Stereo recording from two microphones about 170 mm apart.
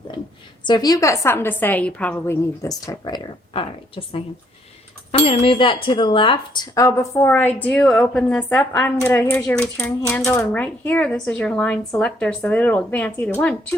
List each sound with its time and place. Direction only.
0.6 s a woman's voice: 25° left (ahead or behind)
5.2 s speech: 30° left (ahead or behind); by 13.7 s 5° left (ahead or behind)